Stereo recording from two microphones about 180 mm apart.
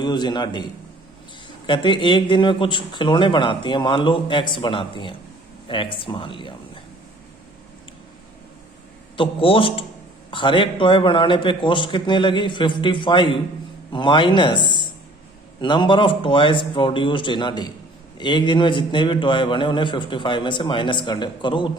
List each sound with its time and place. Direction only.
0.0 s a man's voice: 25° left (ahead or behind)
9.1 s a man's voice: 30° left (ahead or behind)